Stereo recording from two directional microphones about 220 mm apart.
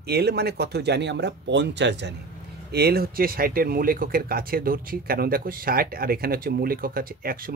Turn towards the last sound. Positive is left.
turn(degrees=-40)  # may be behind; listen again after turning